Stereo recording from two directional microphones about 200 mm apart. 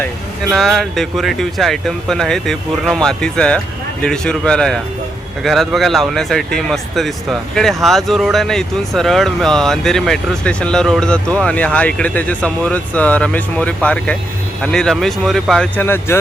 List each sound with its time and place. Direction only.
0.0 s speech: centre (ahead or behind)